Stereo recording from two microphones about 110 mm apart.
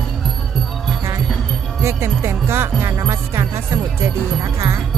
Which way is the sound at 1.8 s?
25° right (ahead or behind).